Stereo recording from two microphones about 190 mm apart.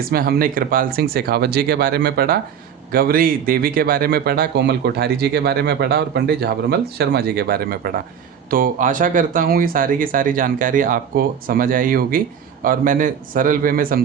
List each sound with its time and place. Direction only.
0.1 s speech: 50° right (ahead or behind)